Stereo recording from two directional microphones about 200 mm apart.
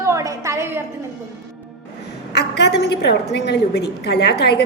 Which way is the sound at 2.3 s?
55° left (ahead or behind).